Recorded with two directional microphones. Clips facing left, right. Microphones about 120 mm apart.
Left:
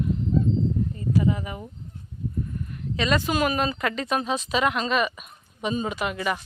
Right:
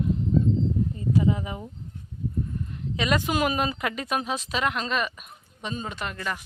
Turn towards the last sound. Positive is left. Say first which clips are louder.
# left 5 dB
turn(degrees=10)  # may be behind; listen again after turning